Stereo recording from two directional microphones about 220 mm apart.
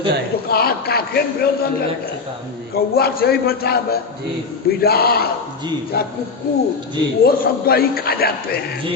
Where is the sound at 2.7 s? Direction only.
45° left (ahead or behind).